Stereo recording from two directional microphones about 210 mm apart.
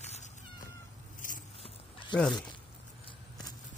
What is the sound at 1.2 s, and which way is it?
Vehicle, 40° left (ahead or behind).